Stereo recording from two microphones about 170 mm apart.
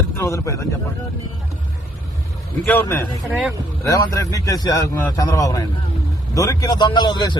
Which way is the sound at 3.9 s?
20° left (ahead or behind).